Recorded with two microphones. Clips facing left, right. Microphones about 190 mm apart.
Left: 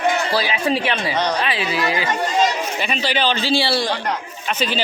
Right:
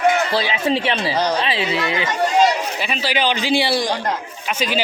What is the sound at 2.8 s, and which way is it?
A man's voice, 5° right (ahead or behind).